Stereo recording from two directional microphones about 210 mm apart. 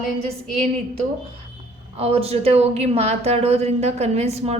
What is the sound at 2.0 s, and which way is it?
Speech, 30° right (ahead or behind).